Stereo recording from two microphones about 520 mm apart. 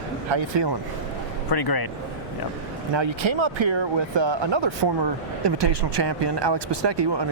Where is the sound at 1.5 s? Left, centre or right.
Left.